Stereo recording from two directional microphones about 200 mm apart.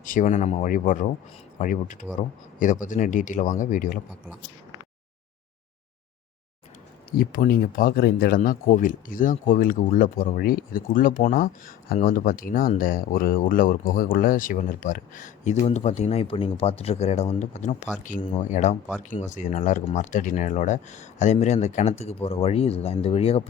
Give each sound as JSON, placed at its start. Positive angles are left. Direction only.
{"t": 0.0, "sound": "speech", "side_deg": 40}
{"t": 7.2, "sound": "speech", "side_deg": 45}